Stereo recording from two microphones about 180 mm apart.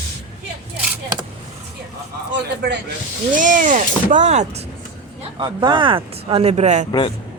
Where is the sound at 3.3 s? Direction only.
45° right (ahead or behind).